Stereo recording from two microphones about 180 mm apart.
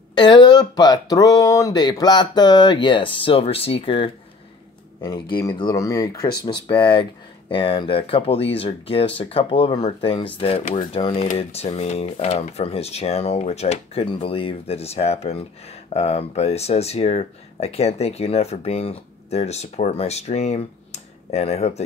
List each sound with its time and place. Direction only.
0.1 s speech: 25° left (ahead or behind)
5.3 s speech: 25° left (ahead or behind)